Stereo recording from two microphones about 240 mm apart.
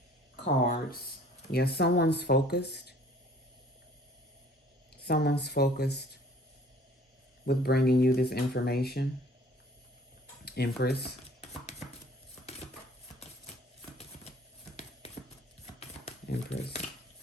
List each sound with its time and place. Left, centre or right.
0.4 s speech: left
5.0 s speech: left
7.4 s speech: left
10.4 s cutlery: left
16.5 s a sound: left